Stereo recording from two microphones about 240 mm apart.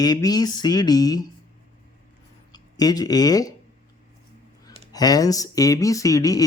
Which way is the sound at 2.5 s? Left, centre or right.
Centre.